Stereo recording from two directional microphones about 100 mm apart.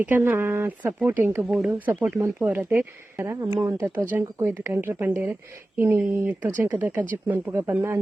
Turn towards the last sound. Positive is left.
turn(degrees=-25)  # may be behind; listen again after turning